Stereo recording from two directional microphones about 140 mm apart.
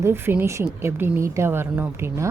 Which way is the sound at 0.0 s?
15° right (ahead or behind).